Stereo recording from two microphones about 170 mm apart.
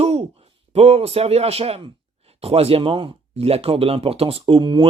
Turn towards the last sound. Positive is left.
turn(degrees=-30)  # may be behind; listen again after turning